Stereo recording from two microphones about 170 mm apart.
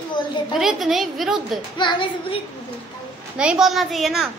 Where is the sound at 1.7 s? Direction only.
30° left (ahead or behind).